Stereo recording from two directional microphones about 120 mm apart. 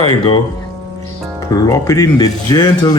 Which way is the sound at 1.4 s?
30° left (ahead or behind).